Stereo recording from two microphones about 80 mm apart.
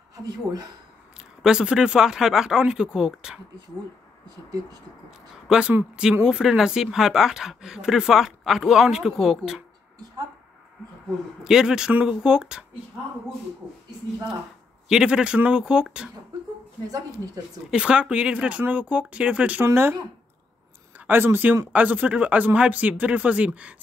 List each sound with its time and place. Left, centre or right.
0.2 s speech: right
1.4 s speech: centre
5.5 s speech: centre
11.4 s speech: centre
14.9 s speech: centre
17.6 s speech: centre
19.6 s speech: right
21.1 s speech: right